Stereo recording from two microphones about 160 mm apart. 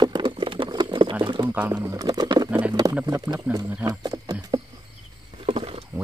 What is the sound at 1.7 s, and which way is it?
Speech, 20° right (ahead or behind).